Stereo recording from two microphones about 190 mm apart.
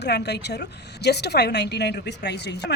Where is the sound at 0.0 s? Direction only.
60° left (ahead or behind).